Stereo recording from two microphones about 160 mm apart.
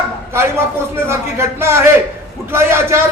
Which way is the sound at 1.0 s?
15° right (ahead or behind).